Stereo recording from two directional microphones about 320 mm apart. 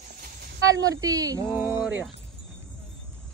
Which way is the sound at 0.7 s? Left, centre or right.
Centre.